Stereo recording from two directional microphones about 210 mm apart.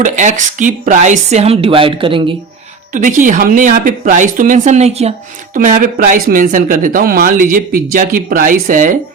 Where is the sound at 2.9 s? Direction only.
40° right (ahead or behind).